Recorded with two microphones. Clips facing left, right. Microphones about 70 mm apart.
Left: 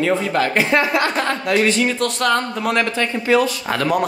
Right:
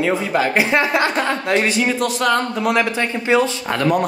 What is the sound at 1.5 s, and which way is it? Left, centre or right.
Speech, right.